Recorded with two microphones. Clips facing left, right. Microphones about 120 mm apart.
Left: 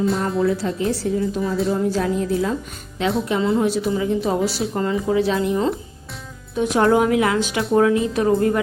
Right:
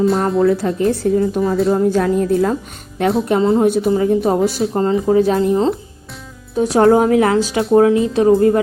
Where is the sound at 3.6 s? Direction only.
50° right (ahead or behind).